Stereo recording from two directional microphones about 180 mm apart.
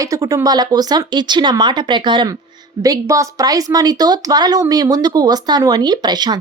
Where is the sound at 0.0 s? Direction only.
20° right (ahead or behind).